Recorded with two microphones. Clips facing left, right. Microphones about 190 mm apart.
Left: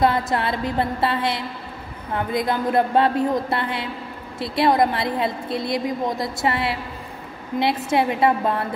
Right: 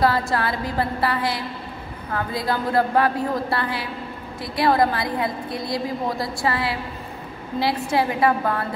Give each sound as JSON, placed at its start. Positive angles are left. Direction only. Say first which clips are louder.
{"t": 0.0, "sound": "a woman's voice", "louder": "left 1 dB", "side_deg": 20}